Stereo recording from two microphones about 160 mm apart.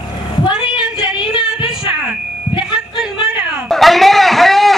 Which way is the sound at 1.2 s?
30° left (ahead or behind).